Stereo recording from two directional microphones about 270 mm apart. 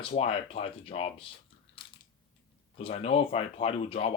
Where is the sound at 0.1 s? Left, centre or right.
Left.